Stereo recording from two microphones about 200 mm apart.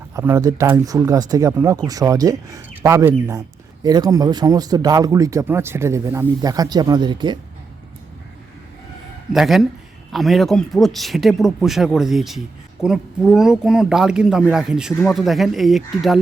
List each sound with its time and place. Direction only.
0.1 s speech: 15° right (ahead or behind)
9.3 s speech: centre (ahead or behind)